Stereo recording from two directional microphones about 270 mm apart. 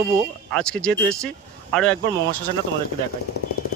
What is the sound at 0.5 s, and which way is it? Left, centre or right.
Speech, centre.